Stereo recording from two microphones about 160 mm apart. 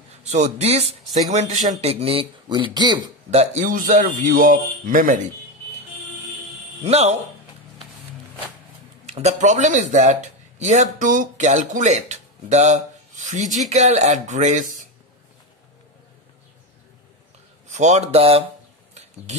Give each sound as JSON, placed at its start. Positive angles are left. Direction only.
{"t": 0.1, "sound": "a man's voice", "side_deg": -45}
{"t": 3.3, "sound": "a man's voice", "side_deg": -45}
{"t": 6.8, "sound": "a man's voice", "side_deg": -40}
{"t": 9.0, "sound": "speech", "side_deg": -45}
{"t": 17.6, "sound": "a man's voice", "side_deg": -45}